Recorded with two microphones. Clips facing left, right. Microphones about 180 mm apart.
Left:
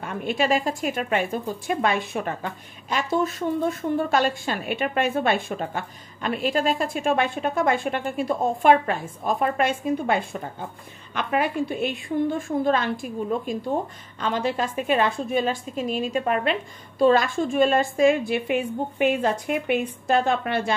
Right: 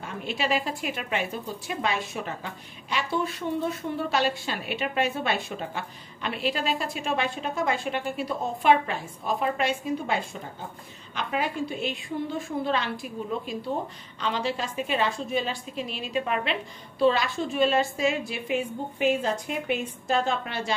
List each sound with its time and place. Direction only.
0.0 s a woman's voice: 55° left (ahead or behind)
11.1 s a woman's voice: 55° left (ahead or behind)